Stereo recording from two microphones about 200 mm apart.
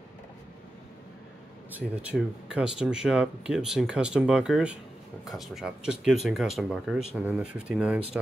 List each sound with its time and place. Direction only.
1.7 s speech: 5° right (ahead or behind)